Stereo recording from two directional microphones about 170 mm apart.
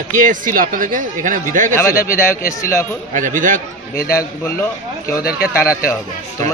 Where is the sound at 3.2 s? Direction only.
50° right (ahead or behind).